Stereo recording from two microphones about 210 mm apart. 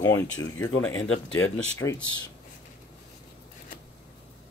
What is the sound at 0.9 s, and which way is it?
Speech, 75° left (ahead or behind).